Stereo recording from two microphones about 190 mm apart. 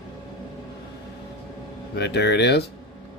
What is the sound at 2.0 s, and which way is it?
Speech, 65° left (ahead or behind).